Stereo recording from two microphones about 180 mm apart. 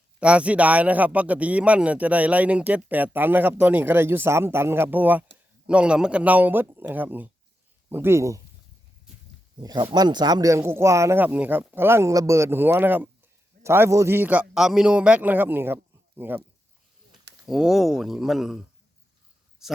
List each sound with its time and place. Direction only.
0.2 s speech: 5° right (ahead or behind)
9.6 s speech: 25° right (ahead or behind)
17.4 s speech: centre (ahead or behind)
19.6 s speech: centre (ahead or behind)